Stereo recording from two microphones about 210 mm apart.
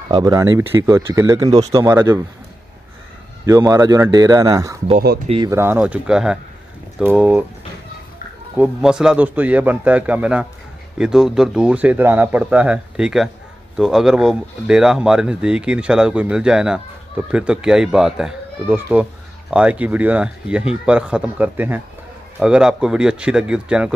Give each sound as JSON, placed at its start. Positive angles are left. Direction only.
{"t": 0.1, "sound": "a man's voice", "side_deg": -15}
{"t": 3.4, "sound": "a man's voice", "side_deg": -15}
{"t": 4.9, "sound": "speech", "side_deg": -40}
{"t": 5.5, "sound": "a man's voice", "side_deg": -10}
{"t": 8.5, "sound": "a man's voice", "side_deg": -5}